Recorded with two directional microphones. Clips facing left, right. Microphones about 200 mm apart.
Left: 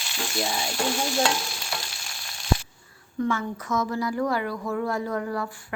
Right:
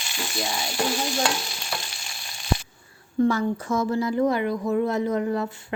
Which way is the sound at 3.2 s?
35° right (ahead or behind).